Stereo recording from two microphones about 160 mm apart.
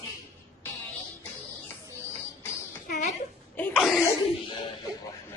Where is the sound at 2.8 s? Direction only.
50° left (ahead or behind).